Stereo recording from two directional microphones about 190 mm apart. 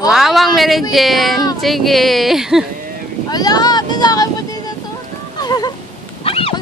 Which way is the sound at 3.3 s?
20° left (ahead or behind).